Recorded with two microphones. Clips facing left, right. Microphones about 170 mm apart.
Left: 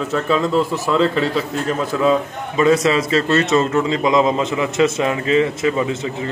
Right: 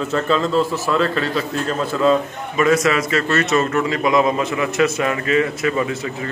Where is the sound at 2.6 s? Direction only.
30° left (ahead or behind).